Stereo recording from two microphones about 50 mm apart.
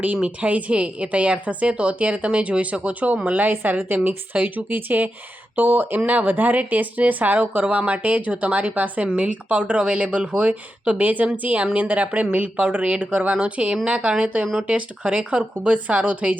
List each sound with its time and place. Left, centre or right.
0.0 s speech: right